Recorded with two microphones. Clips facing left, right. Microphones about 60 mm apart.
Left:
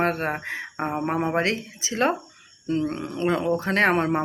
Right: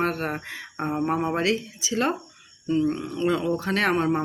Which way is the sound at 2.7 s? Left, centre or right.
Left.